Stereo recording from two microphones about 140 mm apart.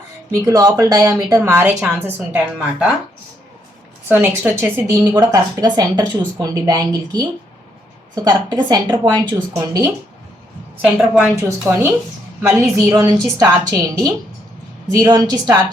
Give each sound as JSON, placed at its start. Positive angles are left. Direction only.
{"t": 0.3, "sound": "speech", "side_deg": -25}
{"t": 4.1, "sound": "speech", "side_deg": -15}
{"t": 10.8, "sound": "speech", "side_deg": -5}
{"t": 12.4, "sound": "a woman's voice", "side_deg": -20}